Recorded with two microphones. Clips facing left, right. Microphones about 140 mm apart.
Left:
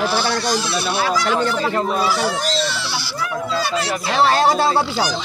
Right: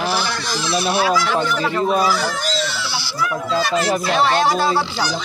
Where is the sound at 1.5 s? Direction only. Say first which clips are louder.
Right 1 dB; 35° left (ahead or behind).